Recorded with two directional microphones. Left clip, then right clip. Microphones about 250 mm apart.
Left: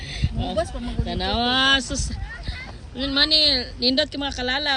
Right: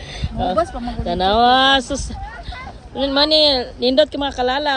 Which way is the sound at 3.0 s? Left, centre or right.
Right.